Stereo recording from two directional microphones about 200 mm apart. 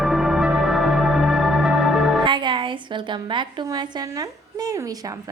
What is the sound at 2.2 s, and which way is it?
A woman's voice, 25° right (ahead or behind).